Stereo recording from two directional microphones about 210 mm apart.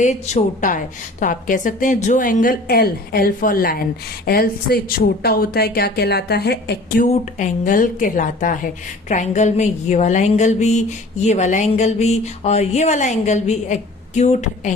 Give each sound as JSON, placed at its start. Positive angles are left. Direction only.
{"t": 0.0, "sound": "a woman's voice", "side_deg": 35}
{"t": 7.1, "sound": "a woman's voice", "side_deg": 35}